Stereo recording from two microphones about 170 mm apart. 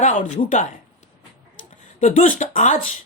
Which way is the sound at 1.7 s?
50° left (ahead or behind).